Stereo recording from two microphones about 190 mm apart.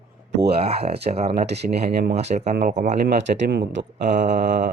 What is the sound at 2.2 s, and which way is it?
Speech, 35° right (ahead or behind).